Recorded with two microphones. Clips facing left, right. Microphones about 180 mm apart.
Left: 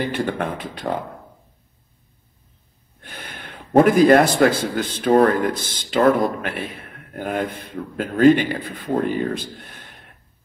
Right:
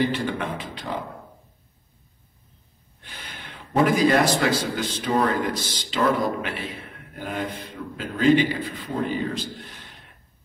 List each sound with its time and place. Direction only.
0.0 s a man's voice: 55° left (ahead or behind)
3.0 s a man's voice: 55° left (ahead or behind)